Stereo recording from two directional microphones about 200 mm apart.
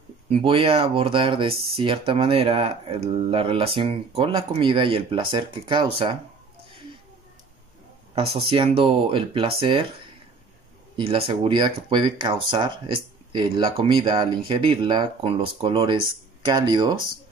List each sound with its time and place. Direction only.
0.3 s speech: 25° right (ahead or behind)
8.1 s speech: 30° right (ahead or behind)
11.0 s speech: 25° right (ahead or behind)